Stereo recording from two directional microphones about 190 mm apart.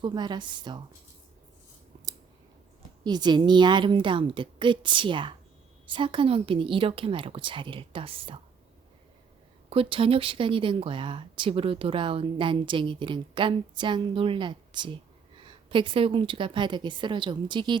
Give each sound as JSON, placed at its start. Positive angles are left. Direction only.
{"t": 0.0, "sound": "speech", "side_deg": -25}
{"t": 3.0, "sound": "speech", "side_deg": -20}
{"t": 9.6, "sound": "speech", "side_deg": -30}